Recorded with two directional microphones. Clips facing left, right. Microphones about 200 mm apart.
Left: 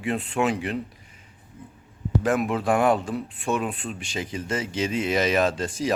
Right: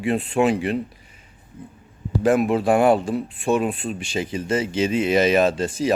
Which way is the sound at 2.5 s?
30° right (ahead or behind).